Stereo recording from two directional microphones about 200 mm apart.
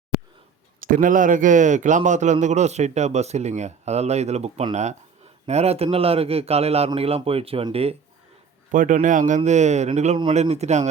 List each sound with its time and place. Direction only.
0.8 s a man's voice: 40° right (ahead or behind)
8.7 s a man's voice: 40° right (ahead or behind)